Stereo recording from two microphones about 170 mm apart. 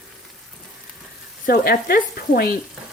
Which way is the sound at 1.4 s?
60° left (ahead or behind).